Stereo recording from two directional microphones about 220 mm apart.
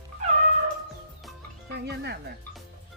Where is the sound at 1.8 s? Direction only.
50° right (ahead or behind).